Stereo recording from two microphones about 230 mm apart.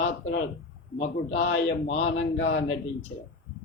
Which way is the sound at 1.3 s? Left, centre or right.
Left.